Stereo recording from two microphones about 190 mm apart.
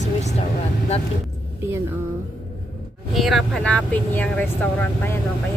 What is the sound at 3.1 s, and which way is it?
Speech, centre (ahead or behind).